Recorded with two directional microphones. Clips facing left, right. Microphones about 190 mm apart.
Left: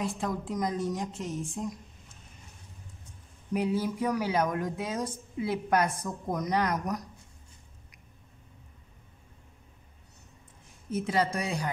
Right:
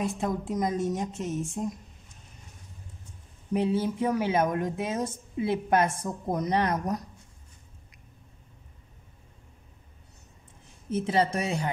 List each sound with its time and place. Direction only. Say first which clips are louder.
0.0 s a woman's voice: right 3 dB; 20° right (ahead or behind)
3.5 s a woman's voice: right 2 dB; 25° right (ahead or behind)
10.9 s a woman's voice: right 3 dB; 25° right (ahead or behind)